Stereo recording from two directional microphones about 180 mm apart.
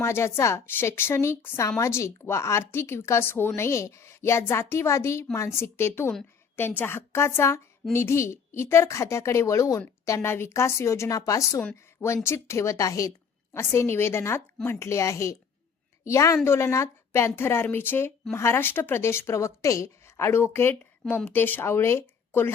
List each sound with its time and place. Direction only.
0.0 s a woman's voice: 15° left (ahead or behind)